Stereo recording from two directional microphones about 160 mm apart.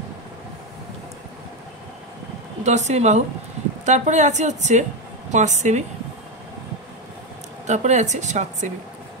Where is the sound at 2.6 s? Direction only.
45° right (ahead or behind).